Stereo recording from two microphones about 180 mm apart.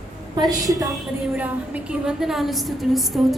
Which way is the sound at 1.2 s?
5° right (ahead or behind).